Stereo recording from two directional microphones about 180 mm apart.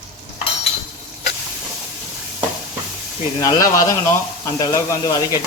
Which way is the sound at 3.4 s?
20° left (ahead or behind).